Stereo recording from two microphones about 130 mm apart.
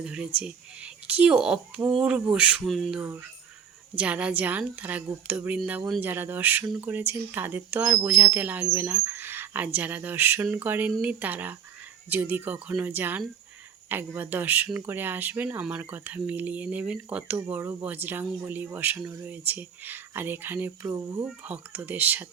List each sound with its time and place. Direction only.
0.0 s speech: 10° right (ahead or behind)
3.0 s speech: 15° right (ahead or behind)
17.5 s speech: 20° right (ahead or behind)